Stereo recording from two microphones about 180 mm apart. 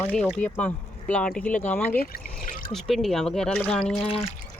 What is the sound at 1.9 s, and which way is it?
Speech, 55° left (ahead or behind).